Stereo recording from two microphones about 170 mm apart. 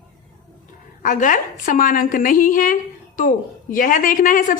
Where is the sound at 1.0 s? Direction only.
50° left (ahead or behind).